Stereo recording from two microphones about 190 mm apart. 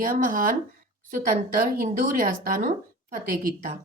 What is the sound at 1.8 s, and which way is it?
Speech, 45° right (ahead or behind).